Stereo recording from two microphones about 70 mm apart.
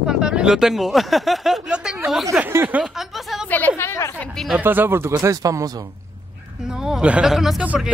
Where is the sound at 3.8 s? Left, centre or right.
Left.